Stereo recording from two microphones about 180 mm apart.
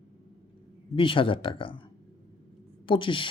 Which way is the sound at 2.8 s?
30° left (ahead or behind).